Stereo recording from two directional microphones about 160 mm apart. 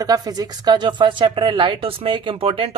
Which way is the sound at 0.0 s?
25° right (ahead or behind).